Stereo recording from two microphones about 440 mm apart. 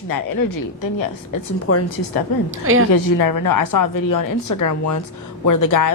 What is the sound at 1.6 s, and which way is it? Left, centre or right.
Speech, left.